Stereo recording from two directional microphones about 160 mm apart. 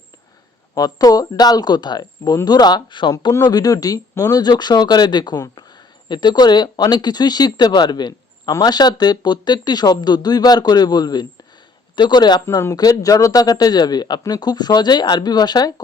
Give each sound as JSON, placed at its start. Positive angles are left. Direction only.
{"t": 0.7, "sound": "speech", "side_deg": 25}